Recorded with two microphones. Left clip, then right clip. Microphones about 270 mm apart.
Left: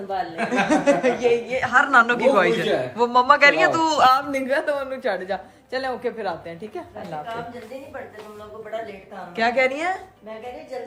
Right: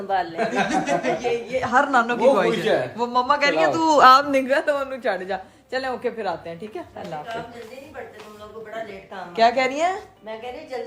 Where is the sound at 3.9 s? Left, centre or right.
Right.